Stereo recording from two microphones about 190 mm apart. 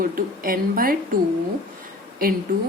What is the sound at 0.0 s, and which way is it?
Speech, 50° right (ahead or behind).